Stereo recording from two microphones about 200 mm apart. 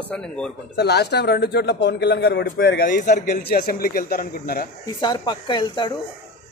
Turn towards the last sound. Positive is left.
turn(degrees=20)  # may be behind; listen again after turning